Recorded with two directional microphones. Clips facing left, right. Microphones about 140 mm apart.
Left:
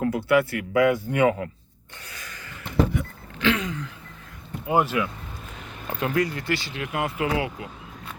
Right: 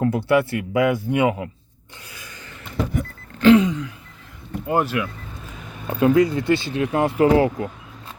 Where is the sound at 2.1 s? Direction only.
15° right (ahead or behind).